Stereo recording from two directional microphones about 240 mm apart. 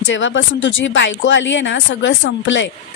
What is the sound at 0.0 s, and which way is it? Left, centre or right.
Speech, left.